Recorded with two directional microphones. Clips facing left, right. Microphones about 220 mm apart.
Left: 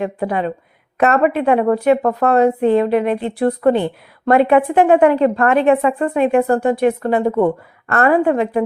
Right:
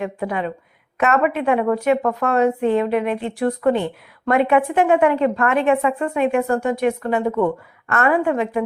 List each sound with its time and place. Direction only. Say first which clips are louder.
0.0 s speech: left 4 dB; 35° left (ahead or behind)